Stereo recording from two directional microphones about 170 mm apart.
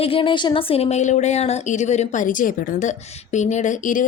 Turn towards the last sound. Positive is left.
turn(degrees=50)  # may be behind; listen again after turning